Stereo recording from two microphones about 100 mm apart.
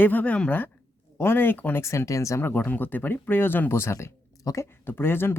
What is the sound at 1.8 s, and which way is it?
Speech, 30° left (ahead or behind).